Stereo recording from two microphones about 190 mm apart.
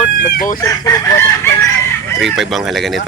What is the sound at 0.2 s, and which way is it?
Chicken, 50° left (ahead or behind).